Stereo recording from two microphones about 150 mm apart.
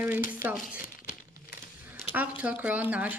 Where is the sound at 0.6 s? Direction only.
10° right (ahead or behind).